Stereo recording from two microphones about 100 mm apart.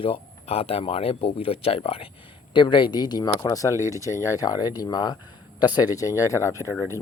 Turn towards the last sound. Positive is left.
turn(degrees=30)  # may be behind; listen again after turning